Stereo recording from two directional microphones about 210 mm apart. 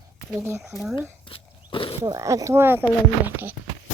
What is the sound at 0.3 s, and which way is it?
Speech, 10° right (ahead or behind).